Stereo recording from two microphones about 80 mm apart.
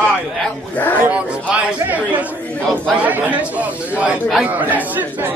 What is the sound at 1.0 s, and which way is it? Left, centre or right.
Speech, centre.